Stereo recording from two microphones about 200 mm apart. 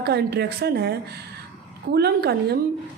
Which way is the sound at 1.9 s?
55° right (ahead or behind).